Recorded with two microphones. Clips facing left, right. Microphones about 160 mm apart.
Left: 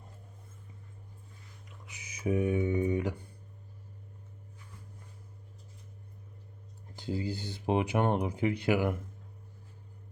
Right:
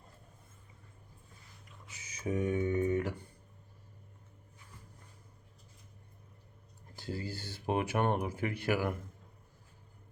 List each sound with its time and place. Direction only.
1.9 s speech: 10° left (ahead or behind)
6.9 s speech: 20° left (ahead or behind)